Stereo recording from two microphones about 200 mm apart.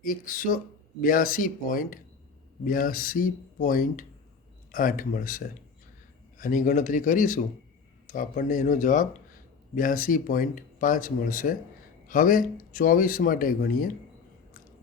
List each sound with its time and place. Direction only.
0.0 s speech: 45° left (ahead or behind)